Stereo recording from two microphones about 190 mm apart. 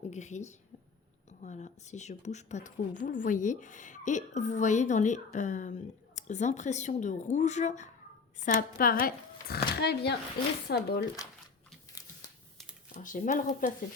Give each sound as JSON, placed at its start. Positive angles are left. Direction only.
{"t": 0.0, "sound": "speech", "side_deg": 35}
{"t": 12.9, "sound": "speech", "side_deg": 45}